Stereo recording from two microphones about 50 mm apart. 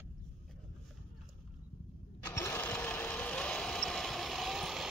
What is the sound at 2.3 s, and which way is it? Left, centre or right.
Sewing machine, left.